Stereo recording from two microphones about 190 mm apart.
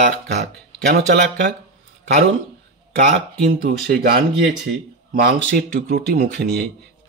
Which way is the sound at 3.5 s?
55° right (ahead or behind).